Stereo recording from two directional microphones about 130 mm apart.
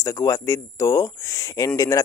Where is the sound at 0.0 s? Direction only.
25° left (ahead or behind).